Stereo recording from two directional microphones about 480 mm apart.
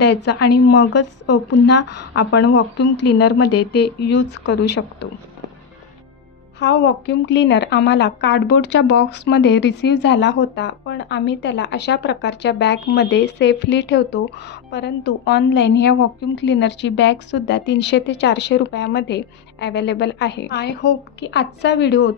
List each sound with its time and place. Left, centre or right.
0.0 s speech: left
6.6 s speech: left
15.9 s speech: left
16.4 s speech: left